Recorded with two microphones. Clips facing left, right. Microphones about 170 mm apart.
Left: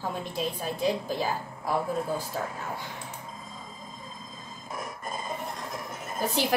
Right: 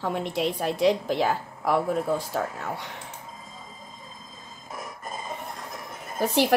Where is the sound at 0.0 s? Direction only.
70° right (ahead or behind).